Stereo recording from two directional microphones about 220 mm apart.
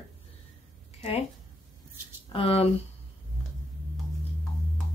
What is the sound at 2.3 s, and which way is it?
Speech, 25° left (ahead or behind).